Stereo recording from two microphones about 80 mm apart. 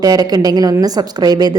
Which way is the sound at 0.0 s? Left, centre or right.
Right.